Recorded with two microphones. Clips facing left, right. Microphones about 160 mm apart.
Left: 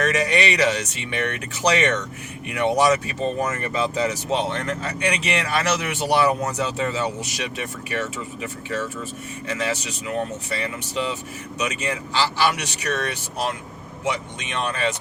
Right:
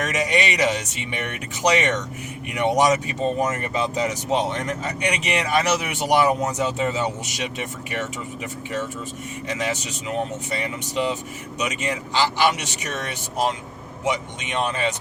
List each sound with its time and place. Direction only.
0.0 s speech: 20° right (ahead or behind)
9.5 s speech: 15° right (ahead or behind)
14.5 s speech: 20° right (ahead or behind)